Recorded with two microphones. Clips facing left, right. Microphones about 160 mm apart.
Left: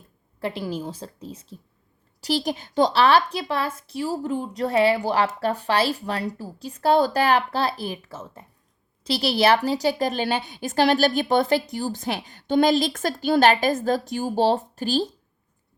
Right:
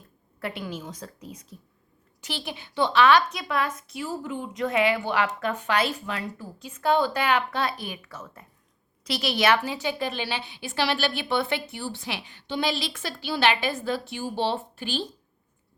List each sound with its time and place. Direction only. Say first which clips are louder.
0.3 s a woman's voice: left 5 dB; 30° left (ahead or behind)
2.2 s a woman's voice: left 10 dB; 40° left (ahead or behind)